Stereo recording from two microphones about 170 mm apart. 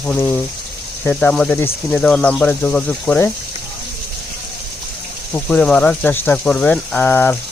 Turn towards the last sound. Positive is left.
turn(degrees=10)  # may be behind; listen again after turning